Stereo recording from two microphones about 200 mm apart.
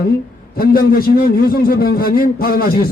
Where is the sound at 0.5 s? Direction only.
50° left (ahead or behind).